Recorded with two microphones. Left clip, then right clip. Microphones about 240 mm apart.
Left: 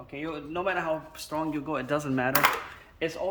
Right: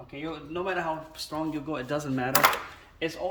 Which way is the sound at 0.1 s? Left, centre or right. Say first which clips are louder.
Left 1 dB; centre.